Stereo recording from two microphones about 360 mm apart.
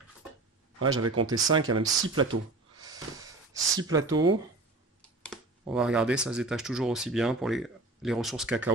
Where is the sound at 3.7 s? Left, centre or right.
Centre.